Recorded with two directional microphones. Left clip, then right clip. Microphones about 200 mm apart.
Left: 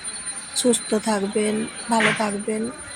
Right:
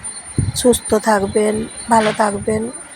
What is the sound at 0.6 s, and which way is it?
Speech, 15° right (ahead or behind).